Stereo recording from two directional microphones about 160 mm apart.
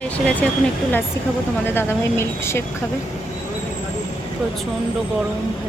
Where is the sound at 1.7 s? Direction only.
15° left (ahead or behind).